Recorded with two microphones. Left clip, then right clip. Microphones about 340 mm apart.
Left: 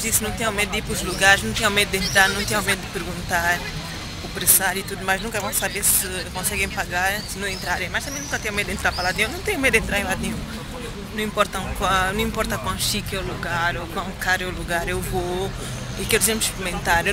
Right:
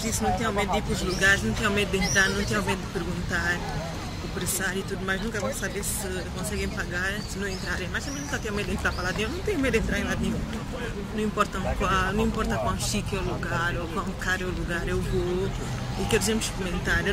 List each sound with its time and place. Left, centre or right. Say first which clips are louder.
0.0 s speech: left 2 dB; centre
4.6 s speech: left 3 dB; centre
6.6 s speech: left 8 dB; centre
11.1 s speech: left 5 dB; centre
16.1 s speech: left 5 dB; centre